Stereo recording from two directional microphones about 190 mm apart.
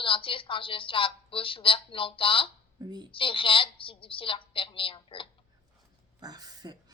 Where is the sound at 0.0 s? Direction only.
30° left (ahead or behind).